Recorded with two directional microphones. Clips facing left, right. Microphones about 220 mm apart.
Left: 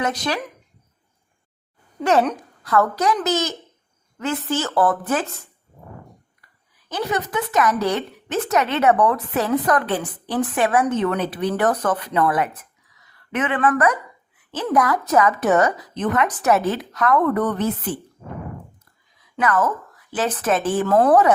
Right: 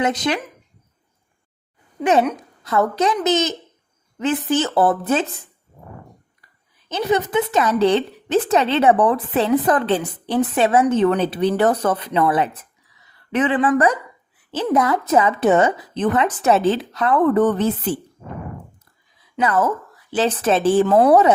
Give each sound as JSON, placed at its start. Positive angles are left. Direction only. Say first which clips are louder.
{"t": 0.0, "sound": "a woman's voice", "louder": "right 4 dB", "side_deg": -20}
{"t": 2.6, "sound": "a woman's voice", "louder": "right 1 dB", "side_deg": -20}
{"t": 6.8, "sound": "a woman's voice", "louder": "right 5 dB", "side_deg": -25}
{"t": 12.9, "sound": "a sound", "louder": "right 4 dB", "side_deg": -30}
{"t": 13.7, "sound": "a woman's voice", "louder": "right 2 dB", "side_deg": -30}
{"t": 19.2, "sound": "a woman's voice", "louder": "right 1 dB", "side_deg": -30}
{"t": 20.8, "sound": "a woman's voice", "louder": "left 1 dB", "side_deg": -15}